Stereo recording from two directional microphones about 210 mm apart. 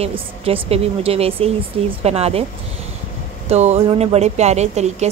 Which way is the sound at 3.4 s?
30° right (ahead or behind).